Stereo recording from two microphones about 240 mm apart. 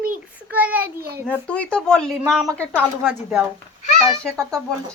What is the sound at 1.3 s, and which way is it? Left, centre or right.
Speech, centre.